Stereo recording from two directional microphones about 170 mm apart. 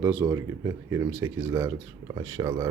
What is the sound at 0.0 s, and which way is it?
Speech, 15° right (ahead or behind).